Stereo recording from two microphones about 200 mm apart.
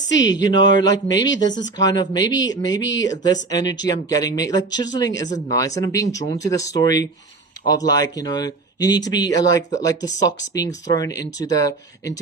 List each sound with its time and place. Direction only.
0.2 s speech: 20° left (ahead or behind)
2.8 s speech: 65° left (ahead or behind)
3.1 s speech: 20° left (ahead or behind)